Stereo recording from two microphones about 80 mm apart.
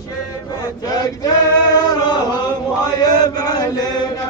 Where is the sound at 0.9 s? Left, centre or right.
Left.